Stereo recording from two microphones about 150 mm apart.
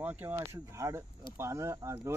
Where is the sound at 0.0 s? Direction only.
15° right (ahead or behind).